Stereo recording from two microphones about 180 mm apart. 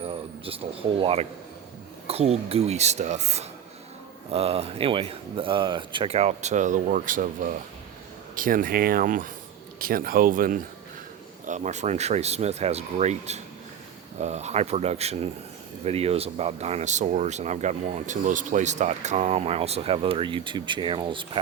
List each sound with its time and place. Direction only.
0.0 s speech: 30° right (ahead or behind)